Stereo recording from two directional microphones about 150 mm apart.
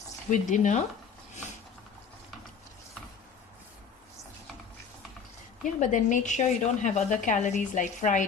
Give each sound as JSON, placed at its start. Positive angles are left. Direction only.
{"t": 0.3, "sound": "a woman's voice", "side_deg": 55}
{"t": 5.6, "sound": "a woman's voice", "side_deg": 60}